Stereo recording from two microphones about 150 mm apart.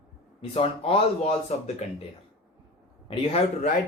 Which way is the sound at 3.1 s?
40° left (ahead or behind).